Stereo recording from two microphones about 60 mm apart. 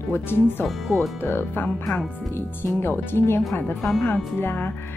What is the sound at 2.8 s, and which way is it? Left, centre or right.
A woman's voice, left.